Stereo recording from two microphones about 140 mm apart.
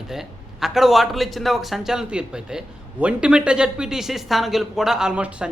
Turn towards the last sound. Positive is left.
turn(degrees=-5)  # may be behind; listen again after turning